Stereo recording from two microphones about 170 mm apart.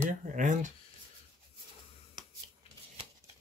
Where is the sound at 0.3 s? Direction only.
50° right (ahead or behind).